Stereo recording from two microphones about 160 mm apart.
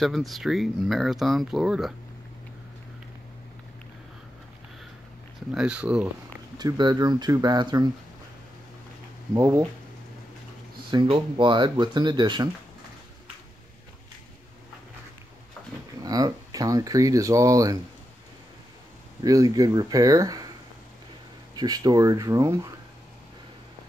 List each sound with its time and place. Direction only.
0.0 s speech: centre (ahead or behind)
5.5 s speech: 5° right (ahead or behind)
6.6 s speech: 25° right (ahead or behind)
9.3 s speech: 20° right (ahead or behind)
10.9 s speech: 30° right (ahead or behind)
16.0 s speech: 25° right (ahead or behind)
19.2 s speech: 20° right (ahead or behind)
21.5 s speech: 25° right (ahead or behind)